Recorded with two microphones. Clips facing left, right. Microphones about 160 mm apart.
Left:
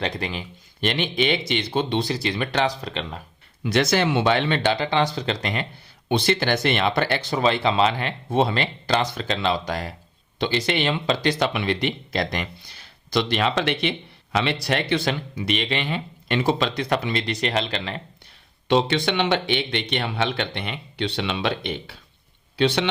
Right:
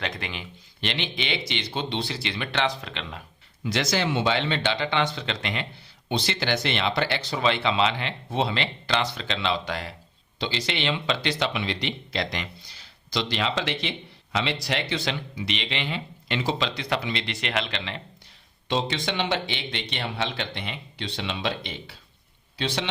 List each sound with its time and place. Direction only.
0.0 s speech: 35° left (ahead or behind)
3.6 s speech: 60° left (ahead or behind); by 5.6 s 40° left (ahead or behind)
6.1 s speech: 55° left (ahead or behind); by 9.9 s 40° left (ahead or behind)
10.3 s speech: 55° left (ahead or behind)
18.7 s speech: 65° left (ahead or behind)